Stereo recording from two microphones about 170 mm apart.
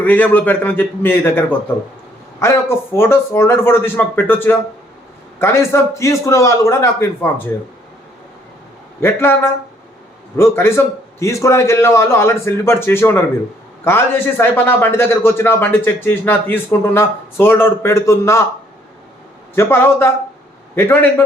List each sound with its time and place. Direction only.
0.0 s a man's voice: 10° left (ahead or behind)
9.0 s a man's voice: 15° left (ahead or behind)
19.5 s a man's voice: 15° left (ahead or behind)